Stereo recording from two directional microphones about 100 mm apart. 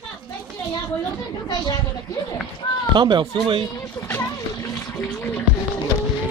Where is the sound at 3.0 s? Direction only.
50° right (ahead or behind).